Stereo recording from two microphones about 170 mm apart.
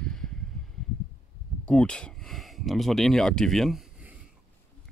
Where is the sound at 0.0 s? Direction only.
5° left (ahead or behind).